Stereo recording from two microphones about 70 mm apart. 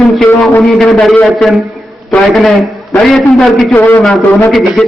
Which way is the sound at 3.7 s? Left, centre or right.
Left.